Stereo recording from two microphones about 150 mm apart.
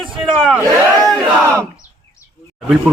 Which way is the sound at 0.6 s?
25° right (ahead or behind).